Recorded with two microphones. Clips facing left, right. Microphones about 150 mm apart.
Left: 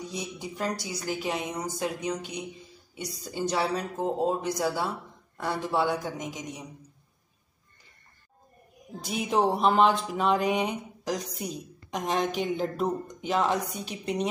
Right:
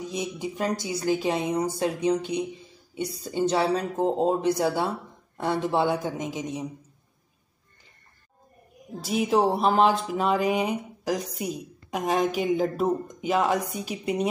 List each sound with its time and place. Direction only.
0.1 s a woman's voice: 20° right (ahead or behind)
9.0 s a woman's voice: centre (ahead or behind)